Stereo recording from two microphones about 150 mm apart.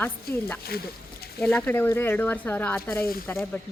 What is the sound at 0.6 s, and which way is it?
Speech, 90° left.